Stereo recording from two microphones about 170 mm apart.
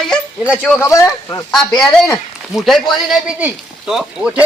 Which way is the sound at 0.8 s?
20° left (ahead or behind).